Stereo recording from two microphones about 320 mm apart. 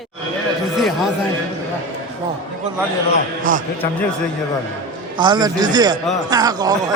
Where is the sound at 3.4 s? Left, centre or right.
Right.